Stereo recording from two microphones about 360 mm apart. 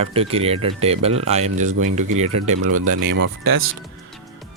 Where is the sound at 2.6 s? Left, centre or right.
Right.